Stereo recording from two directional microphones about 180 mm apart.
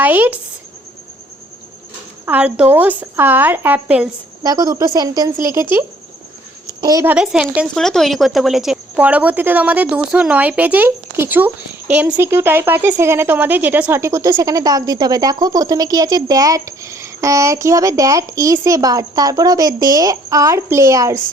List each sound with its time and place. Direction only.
0.0 s a woman's voice: 10° right (ahead or behind)
2.2 s a woman's voice: 10° right (ahead or behind)
4.4 s speech: 20° right (ahead or behind)
6.8 s a woman's voice: 15° right (ahead or behind)